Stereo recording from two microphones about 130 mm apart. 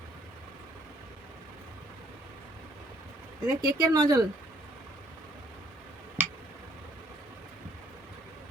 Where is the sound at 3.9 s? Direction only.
30° right (ahead or behind).